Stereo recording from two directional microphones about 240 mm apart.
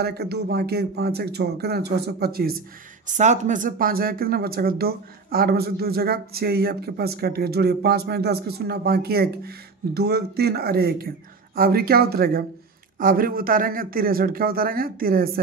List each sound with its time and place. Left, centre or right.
0.0 s speech: right